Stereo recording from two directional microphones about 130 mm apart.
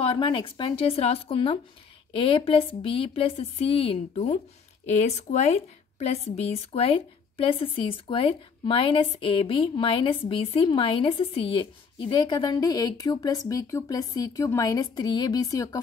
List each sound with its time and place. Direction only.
0.0 s a woman's voice: 40° left (ahead or behind)